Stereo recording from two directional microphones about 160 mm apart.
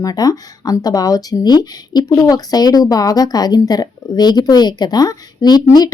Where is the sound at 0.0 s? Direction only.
25° left (ahead or behind).